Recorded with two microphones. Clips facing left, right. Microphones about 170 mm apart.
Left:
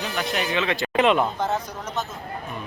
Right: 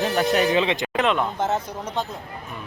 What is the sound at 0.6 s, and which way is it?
Speech, 20° right (ahead or behind).